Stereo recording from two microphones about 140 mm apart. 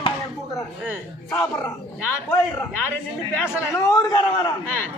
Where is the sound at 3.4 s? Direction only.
20° left (ahead or behind).